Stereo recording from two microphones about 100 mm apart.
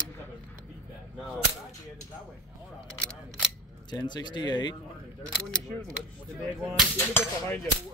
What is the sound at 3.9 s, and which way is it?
Speech, 45° left (ahead or behind).